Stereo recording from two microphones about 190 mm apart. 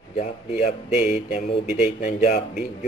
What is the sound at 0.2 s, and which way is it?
Speech, 35° left (ahead or behind).